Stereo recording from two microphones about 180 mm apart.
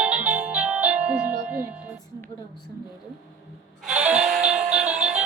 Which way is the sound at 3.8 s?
5° right (ahead or behind).